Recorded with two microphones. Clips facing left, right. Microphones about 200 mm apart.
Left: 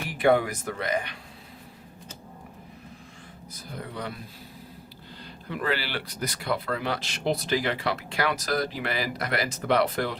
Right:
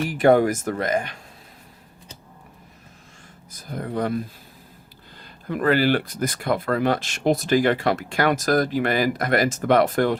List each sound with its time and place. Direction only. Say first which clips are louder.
0.1 s speech: right 5 dB; 45° right (ahead or behind)
3.5 s speech: right 9 dB; 45° right (ahead or behind)
5.5 s speech: right 10 dB; 50° right (ahead or behind)